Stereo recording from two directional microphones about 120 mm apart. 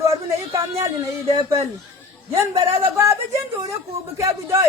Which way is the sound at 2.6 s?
25° right (ahead or behind).